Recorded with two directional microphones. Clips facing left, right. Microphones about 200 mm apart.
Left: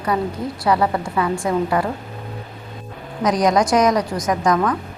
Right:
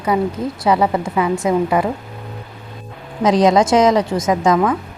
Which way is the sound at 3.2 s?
25° right (ahead or behind).